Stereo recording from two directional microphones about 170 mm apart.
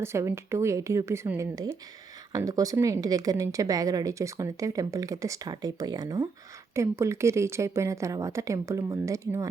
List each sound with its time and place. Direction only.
0.0 s a woman's voice: 15° right (ahead or behind)